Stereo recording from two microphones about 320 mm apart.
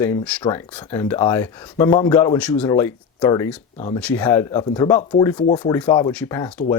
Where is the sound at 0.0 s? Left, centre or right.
Centre.